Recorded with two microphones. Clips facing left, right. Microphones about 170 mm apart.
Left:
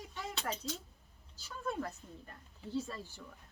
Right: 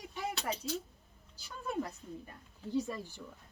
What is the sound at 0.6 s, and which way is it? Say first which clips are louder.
Speech: right 5 dB; 15° right (ahead or behind).